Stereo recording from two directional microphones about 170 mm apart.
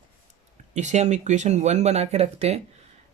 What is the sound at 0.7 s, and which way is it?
Speech, 45° right (ahead or behind).